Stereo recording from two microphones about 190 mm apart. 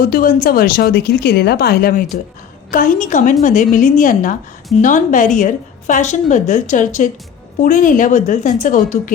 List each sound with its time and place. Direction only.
0.0 s a woman's voice: 50° left (ahead or behind)